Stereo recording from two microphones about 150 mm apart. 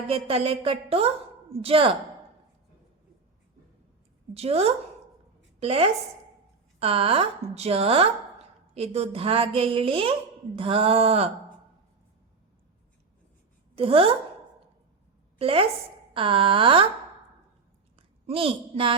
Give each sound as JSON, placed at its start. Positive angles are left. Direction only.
{"t": 0.1, "sound": "a woman's voice", "side_deg": -40}
{"t": 4.4, "sound": "a woman's voice", "side_deg": -45}
{"t": 13.7, "sound": "a woman's voice", "side_deg": -40}
{"t": 15.4, "sound": "a woman's voice", "side_deg": -40}
{"t": 17.9, "sound": "a sound", "side_deg": -40}